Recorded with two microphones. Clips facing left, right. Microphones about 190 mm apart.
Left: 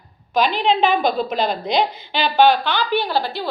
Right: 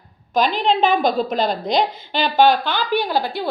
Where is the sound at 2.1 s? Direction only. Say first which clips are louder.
Even; 45° right (ahead or behind).